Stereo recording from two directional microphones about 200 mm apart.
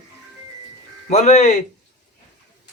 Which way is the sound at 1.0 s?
35° left (ahead or behind).